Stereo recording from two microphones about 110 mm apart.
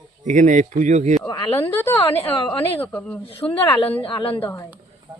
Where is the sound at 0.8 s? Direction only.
90° right.